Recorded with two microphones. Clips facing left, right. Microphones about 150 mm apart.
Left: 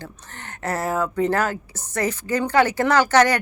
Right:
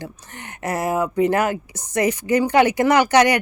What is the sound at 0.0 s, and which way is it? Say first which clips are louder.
Speech: right 3 dB; 15° right (ahead or behind).